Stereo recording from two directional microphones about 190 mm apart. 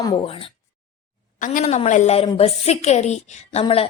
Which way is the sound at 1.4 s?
40° left (ahead or behind).